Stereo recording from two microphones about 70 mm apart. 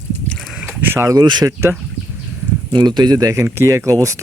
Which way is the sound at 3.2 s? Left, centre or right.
Right.